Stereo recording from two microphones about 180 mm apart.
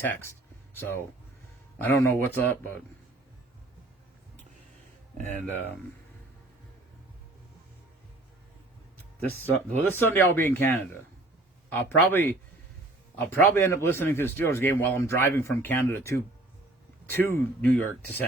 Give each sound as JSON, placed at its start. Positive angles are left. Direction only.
{"t": 0.0, "sound": "speech", "side_deg": 15}
{"t": 5.1, "sound": "speech", "side_deg": -40}
{"t": 5.4, "sound": "speech", "side_deg": -10}
{"t": 9.9, "sound": "speech", "side_deg": 10}